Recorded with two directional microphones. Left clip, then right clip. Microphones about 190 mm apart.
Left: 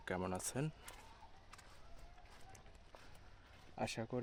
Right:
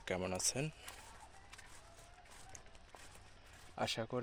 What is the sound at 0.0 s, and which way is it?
Speech, 15° left (ahead or behind).